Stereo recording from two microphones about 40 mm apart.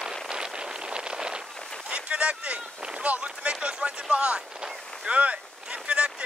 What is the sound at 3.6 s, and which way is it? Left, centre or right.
Speech, right.